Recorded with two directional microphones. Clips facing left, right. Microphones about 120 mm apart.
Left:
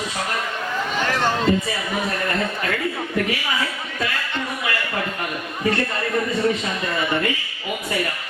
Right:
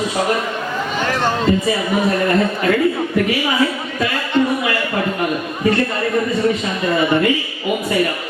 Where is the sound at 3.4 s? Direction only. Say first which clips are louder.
Right 8 dB; 20° right (ahead or behind).